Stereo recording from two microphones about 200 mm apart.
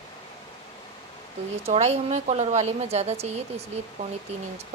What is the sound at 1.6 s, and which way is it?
A woman's voice, 30° right (ahead or behind).